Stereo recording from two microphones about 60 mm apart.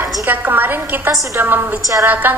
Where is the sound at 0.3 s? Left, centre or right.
Right.